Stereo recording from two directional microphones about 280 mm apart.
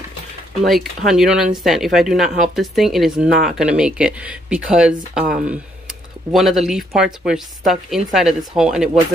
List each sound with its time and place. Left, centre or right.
0.7 s speech: centre
5.2 s speech: right
6.3 s speech: centre